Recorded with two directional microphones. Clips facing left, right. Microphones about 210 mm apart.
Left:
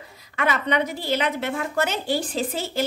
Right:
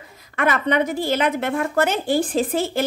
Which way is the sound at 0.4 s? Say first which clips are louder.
Right 3 dB; 50° right (ahead or behind).